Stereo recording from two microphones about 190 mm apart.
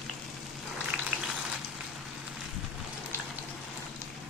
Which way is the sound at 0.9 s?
5° right (ahead or behind).